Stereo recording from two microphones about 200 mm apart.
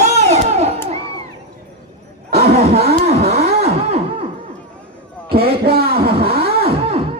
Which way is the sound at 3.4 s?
30° right (ahead or behind).